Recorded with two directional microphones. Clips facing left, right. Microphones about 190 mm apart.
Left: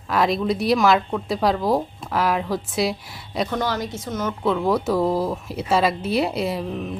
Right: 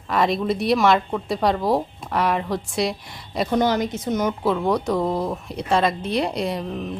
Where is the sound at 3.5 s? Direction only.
20° right (ahead or behind).